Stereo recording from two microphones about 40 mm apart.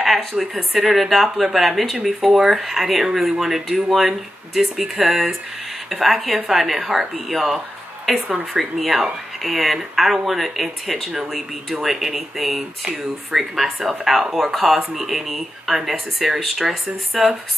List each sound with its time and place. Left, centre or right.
0.3 s speech: centre